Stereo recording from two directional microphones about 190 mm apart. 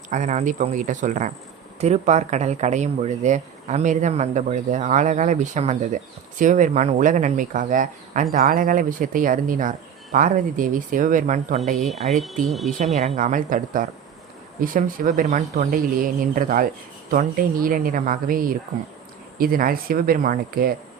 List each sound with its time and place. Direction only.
0.1 s speech: 40° right (ahead or behind)
12.1 s speech: centre (ahead or behind)
12.8 s speech: 35° right (ahead or behind)